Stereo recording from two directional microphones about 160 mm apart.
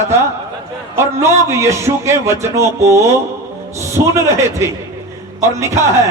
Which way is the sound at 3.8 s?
15° right (ahead or behind).